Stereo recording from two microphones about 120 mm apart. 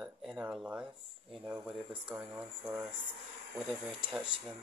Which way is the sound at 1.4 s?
10° right (ahead or behind).